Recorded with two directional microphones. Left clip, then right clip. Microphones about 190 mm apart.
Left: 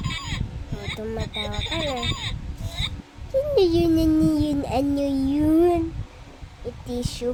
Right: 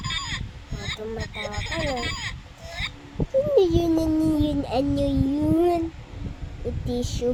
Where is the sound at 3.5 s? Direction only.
30° left (ahead or behind).